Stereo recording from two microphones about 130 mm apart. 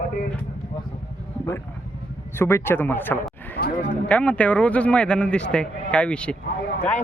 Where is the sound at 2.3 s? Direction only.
20° left (ahead or behind).